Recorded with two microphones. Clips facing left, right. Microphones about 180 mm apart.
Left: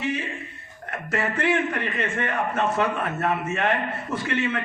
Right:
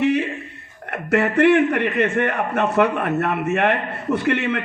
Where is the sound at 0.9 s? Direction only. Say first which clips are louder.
Right 8 dB; 65° right (ahead or behind).